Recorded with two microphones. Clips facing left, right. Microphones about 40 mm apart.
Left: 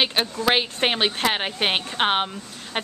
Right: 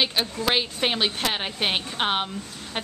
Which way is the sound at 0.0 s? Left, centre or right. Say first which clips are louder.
Left 2 dB; left.